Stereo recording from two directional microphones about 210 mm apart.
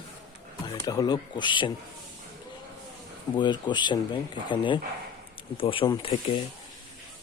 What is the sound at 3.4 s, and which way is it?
Speech, 20° left (ahead or behind).